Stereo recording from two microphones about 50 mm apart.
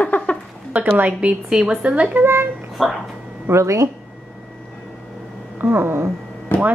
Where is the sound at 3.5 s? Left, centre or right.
Right.